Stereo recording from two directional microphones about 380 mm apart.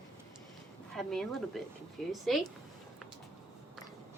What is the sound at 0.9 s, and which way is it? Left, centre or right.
Speech, centre.